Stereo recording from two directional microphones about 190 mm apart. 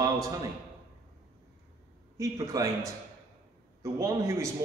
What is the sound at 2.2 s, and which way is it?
Speech, 15° right (ahead or behind).